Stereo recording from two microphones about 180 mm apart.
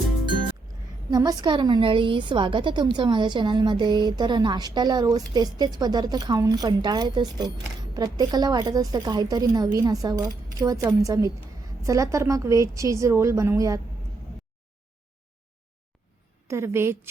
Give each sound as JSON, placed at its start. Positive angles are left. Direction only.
{"t": 1.1, "sound": "a woman's voice", "side_deg": -20}
{"t": 16.5, "sound": "a woman's voice", "side_deg": -15}